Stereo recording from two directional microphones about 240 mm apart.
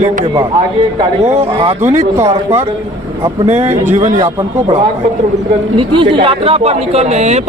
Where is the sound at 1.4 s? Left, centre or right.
Right.